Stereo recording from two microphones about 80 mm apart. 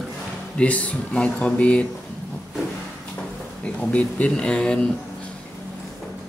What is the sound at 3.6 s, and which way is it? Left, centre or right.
A man's voice, centre.